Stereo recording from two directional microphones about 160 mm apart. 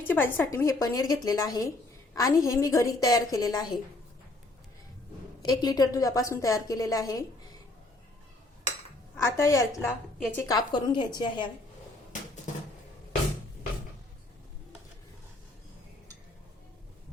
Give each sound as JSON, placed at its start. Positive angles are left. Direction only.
{"t": 0.1, "sound": "a woman's voice", "side_deg": 15}
{"t": 5.4, "sound": "a woman's voice", "side_deg": 25}
{"t": 9.1, "sound": "a woman's voice", "side_deg": 20}